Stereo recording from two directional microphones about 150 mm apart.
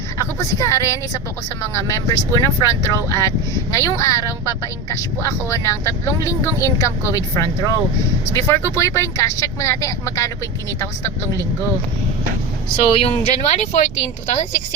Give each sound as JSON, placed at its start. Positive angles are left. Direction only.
{"t": 0.2, "sound": "speech", "side_deg": 20}
{"t": 12.7, "sound": "speech", "side_deg": 40}
{"t": 13.2, "sound": "speech", "side_deg": 50}